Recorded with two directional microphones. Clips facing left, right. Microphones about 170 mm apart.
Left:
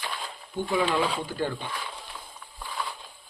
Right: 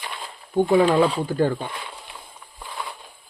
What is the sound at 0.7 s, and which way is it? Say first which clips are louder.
Speech: right 8 dB; 50° right (ahead or behind).